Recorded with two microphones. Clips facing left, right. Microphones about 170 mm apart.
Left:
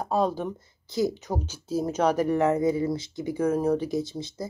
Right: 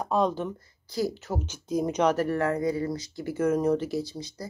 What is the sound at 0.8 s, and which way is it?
Speech, 20° left (ahead or behind).